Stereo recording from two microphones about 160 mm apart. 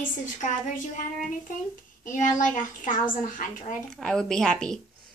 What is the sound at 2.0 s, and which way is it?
A woman's voice, 50° left (ahead or behind).